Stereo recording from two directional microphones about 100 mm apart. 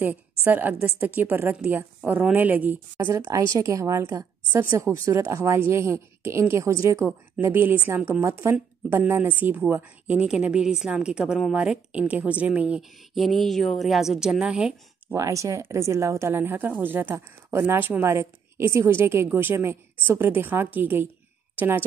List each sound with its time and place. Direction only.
0.5 s a woman's voice: 15° right (ahead or behind)
7.4 s speech: 20° right (ahead or behind)
10.1 s a woman's voice: 10° right (ahead or behind)
13.1 s a woman's voice: centre (ahead or behind)
15.1 s speech: 30° right (ahead or behind)